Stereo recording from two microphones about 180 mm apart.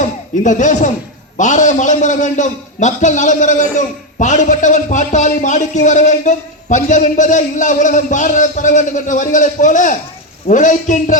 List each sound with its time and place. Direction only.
0.0 s speech: 45° left (ahead or behind)